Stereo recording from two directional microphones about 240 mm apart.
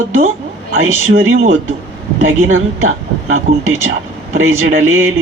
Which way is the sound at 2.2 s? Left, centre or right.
Right.